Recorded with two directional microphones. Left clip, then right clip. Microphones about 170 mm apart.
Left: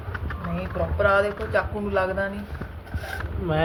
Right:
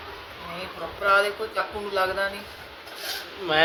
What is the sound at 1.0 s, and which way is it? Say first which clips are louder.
Speech: even; 35° left (ahead or behind).